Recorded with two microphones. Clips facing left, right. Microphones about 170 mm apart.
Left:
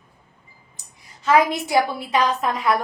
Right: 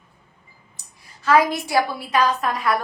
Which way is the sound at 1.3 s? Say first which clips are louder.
Even; 20° left (ahead or behind).